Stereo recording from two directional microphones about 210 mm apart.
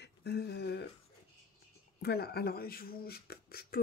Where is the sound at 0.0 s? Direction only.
50° left (ahead or behind).